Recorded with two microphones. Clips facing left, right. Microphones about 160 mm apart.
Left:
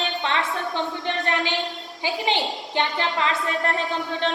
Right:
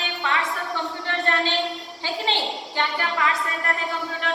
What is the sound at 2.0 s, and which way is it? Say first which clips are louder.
A woman's voice: left 2 dB; 15° left (ahead or behind).